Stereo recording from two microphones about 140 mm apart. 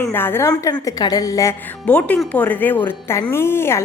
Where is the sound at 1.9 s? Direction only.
10° left (ahead or behind).